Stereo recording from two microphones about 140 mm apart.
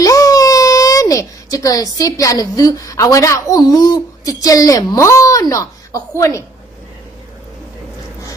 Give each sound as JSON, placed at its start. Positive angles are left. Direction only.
{"t": 0.0, "sound": "a child's voice", "side_deg": 25}